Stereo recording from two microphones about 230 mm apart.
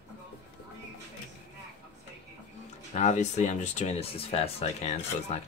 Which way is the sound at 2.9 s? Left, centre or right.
Left.